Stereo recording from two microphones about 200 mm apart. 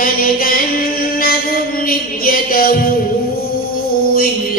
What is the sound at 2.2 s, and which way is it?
Music, 45° left (ahead or behind).